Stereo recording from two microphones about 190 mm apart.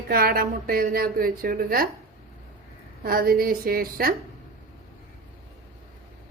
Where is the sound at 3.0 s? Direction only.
50° right (ahead or behind).